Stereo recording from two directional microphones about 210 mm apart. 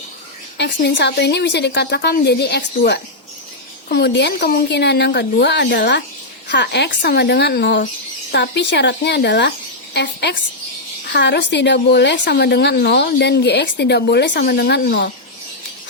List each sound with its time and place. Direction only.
0.5 s a woman's voice: 55° left (ahead or behind)